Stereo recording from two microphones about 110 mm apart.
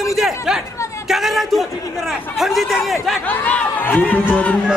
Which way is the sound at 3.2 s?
15° left (ahead or behind).